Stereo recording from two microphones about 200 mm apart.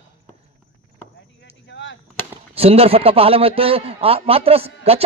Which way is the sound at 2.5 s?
30° right (ahead or behind).